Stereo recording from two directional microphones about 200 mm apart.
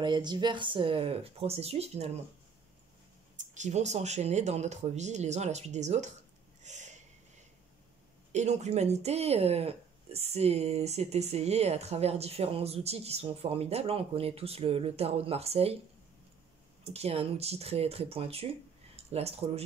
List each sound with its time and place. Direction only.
0.0 s speech: 20° right (ahead or behind)
3.5 s speech: 35° right (ahead or behind)
6.6 s snort: 35° right (ahead or behind)
8.3 s speech: 35° right (ahead or behind)
16.8 s speech: 30° right (ahead or behind)